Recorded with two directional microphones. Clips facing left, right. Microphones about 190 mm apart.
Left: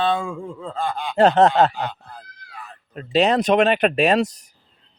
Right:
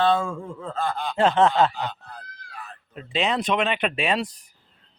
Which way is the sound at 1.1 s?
40° left (ahead or behind).